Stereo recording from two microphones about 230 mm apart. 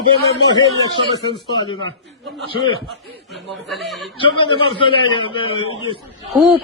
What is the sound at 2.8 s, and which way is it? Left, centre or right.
A man's voice, centre.